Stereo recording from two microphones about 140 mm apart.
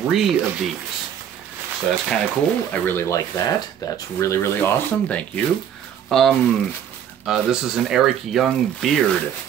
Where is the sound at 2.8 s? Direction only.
20° left (ahead or behind).